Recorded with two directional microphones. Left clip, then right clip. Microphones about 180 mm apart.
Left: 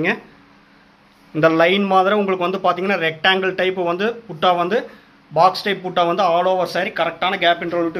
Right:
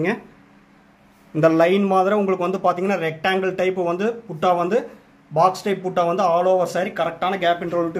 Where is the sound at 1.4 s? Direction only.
15° right (ahead or behind).